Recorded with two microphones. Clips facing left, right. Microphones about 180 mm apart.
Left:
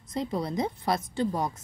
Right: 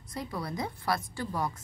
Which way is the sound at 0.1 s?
20° left (ahead or behind).